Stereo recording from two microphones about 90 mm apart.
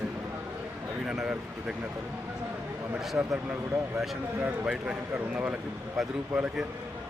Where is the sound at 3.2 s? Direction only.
20° right (ahead or behind).